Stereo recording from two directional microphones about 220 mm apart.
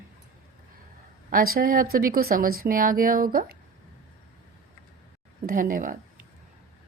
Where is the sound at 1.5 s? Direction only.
40° right (ahead or behind).